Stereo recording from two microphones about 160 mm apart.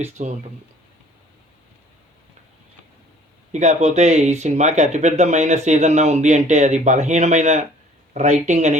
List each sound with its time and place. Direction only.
0.0 s speech: 45° right (ahead or behind)
3.5 s speech: 50° right (ahead or behind)